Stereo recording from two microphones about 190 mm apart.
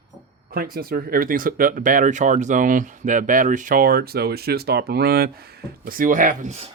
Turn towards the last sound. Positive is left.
turn(degrees=-35)  # may be behind; listen again after turning